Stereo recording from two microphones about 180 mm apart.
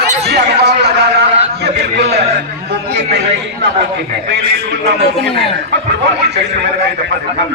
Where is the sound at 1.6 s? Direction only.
70° right (ahead or behind).